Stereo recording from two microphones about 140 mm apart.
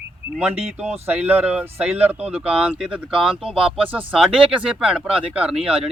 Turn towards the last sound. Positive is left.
turn(degrees=-5)  # may be behind; listen again after turning